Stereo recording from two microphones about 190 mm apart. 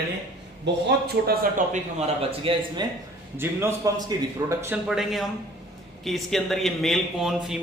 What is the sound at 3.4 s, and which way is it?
A man's voice, 15° right (ahead or behind).